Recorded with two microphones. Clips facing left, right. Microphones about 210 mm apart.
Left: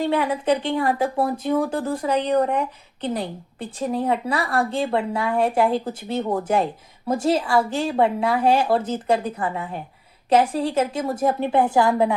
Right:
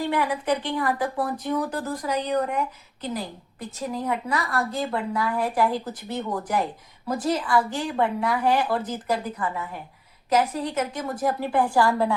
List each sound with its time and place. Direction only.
0.0 s a woman's voice: 25° left (ahead or behind)